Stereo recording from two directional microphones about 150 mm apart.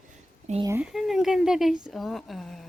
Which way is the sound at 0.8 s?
Centre (ahead or behind).